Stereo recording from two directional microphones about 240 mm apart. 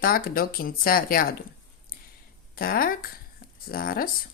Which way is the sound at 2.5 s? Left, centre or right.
Left.